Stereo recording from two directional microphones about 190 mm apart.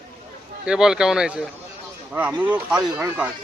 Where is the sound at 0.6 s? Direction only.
5° right (ahead or behind).